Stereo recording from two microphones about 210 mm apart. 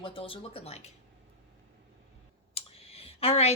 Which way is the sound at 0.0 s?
25° left (ahead or behind).